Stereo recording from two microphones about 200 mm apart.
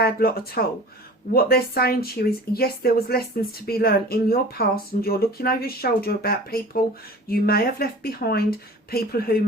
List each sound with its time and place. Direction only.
0.0 s speech: 50° left (ahead or behind)